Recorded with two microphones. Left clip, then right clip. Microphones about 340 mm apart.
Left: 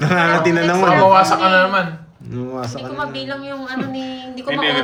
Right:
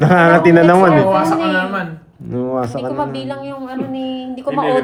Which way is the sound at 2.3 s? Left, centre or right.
Centre.